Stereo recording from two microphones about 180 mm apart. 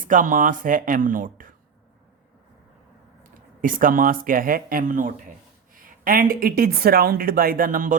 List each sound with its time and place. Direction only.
0.0 s speech: 50° right (ahead or behind)
3.6 s speech: 50° right (ahead or behind)